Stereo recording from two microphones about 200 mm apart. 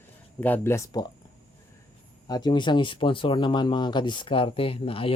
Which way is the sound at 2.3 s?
20° left (ahead or behind).